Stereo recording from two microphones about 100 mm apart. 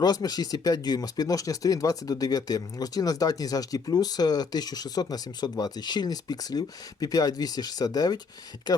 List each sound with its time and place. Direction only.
0.0 s speech: 40° left (ahead or behind)